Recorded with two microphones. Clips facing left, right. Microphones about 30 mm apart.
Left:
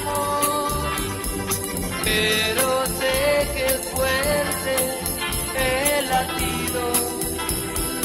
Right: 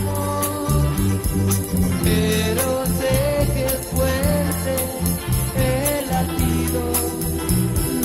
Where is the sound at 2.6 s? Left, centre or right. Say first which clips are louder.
Even; left.